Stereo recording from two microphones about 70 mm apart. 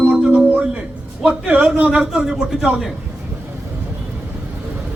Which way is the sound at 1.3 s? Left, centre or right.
Centre.